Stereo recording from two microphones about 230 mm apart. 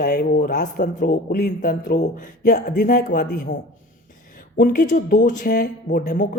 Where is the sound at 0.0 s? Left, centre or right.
Left.